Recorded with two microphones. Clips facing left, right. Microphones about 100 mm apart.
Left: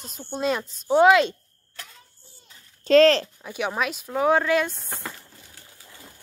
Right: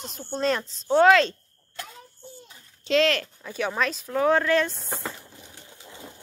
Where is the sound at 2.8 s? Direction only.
40° left (ahead or behind).